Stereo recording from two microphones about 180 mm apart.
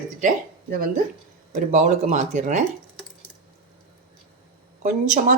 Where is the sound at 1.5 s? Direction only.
40° right (ahead or behind).